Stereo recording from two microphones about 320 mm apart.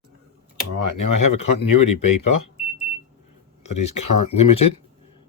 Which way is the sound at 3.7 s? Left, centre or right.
Left.